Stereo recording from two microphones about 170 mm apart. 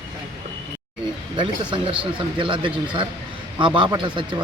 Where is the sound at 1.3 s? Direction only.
30° right (ahead or behind).